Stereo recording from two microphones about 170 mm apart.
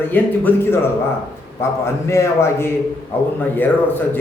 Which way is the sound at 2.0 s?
15° left (ahead or behind).